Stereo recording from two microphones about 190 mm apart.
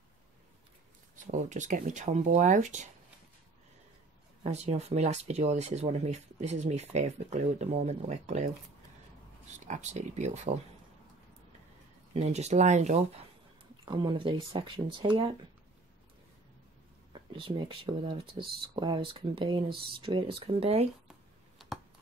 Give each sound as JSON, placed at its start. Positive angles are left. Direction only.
{"t": 1.1, "sound": "speech", "side_deg": -40}
{"t": 4.4, "sound": "speech", "side_deg": -35}
{"t": 9.5, "sound": "speech", "side_deg": -40}
{"t": 12.1, "sound": "speech", "side_deg": -35}
{"t": 13.8, "sound": "speech", "side_deg": -25}
{"t": 17.1, "sound": "speech", "side_deg": -25}